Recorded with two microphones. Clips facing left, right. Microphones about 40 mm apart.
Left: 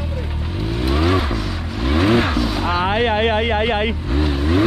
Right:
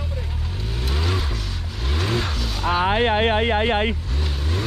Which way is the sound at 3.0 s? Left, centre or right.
Left.